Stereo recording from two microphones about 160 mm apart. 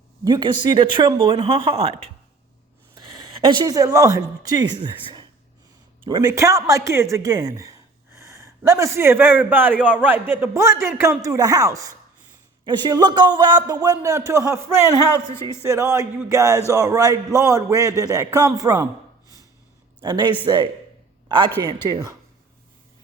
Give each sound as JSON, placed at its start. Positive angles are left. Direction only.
{"t": 0.3, "sound": "speech", "side_deg": -30}
{"t": 3.4, "sound": "speech", "side_deg": -30}
{"t": 15.6, "sound": "speech", "side_deg": -20}
{"t": 20.0, "sound": "a man's voice", "side_deg": -25}